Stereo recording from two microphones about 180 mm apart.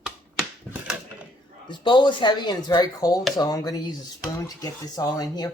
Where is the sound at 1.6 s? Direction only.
25° left (ahead or behind).